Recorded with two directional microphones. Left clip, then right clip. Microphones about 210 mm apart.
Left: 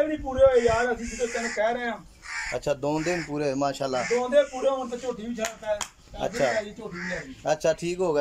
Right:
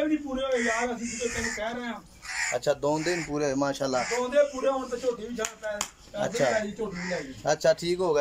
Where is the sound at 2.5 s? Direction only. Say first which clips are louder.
Right 1 dB; 5° left (ahead or behind).